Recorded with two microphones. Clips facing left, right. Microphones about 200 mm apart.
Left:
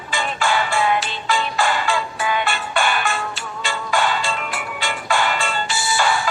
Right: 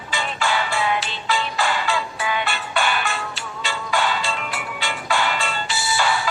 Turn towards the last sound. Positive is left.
turn(degrees=50)  # may be behind; listen again after turning